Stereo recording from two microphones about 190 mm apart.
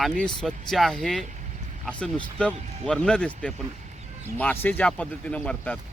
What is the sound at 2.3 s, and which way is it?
Speech, 5° left (ahead or behind).